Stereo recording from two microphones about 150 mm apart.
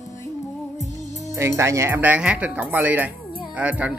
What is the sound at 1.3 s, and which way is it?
Speech, 20° right (ahead or behind).